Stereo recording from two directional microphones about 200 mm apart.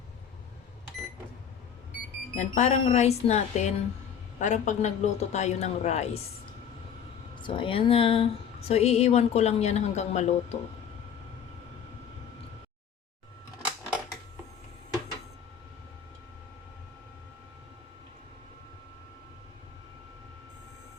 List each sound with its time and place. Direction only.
2.3 s a woman's voice: 35° left (ahead or behind)
7.3 s a woman's voice: 25° left (ahead or behind)